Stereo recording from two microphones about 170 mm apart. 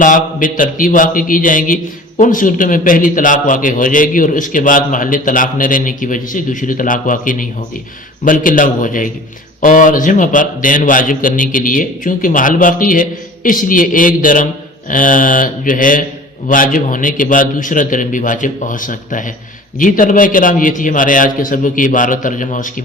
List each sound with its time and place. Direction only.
0.0 s a man's voice: 50° left (ahead or behind)